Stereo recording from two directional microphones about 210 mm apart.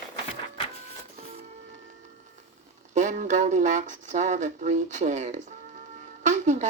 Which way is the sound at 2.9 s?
35° right (ahead or behind).